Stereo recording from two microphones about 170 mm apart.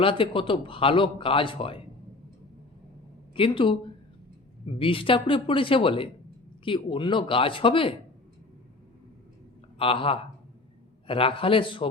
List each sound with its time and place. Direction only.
0.0 s speech: 30° left (ahead or behind)
3.3 s speech: 30° left (ahead or behind)
4.8 s speech: 30° left (ahead or behind)
9.7 s speech: 30° left (ahead or behind)